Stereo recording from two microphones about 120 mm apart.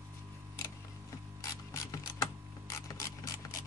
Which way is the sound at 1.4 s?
30° left (ahead or behind).